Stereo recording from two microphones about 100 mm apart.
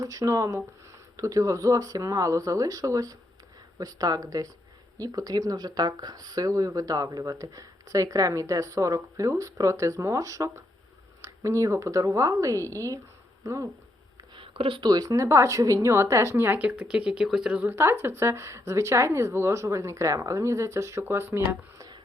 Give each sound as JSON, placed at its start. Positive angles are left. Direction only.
{"t": 0.0, "sound": "speech", "side_deg": -35}
{"t": 14.3, "sound": "a sound", "side_deg": -60}
{"t": 14.8, "sound": "a woman's voice", "side_deg": -40}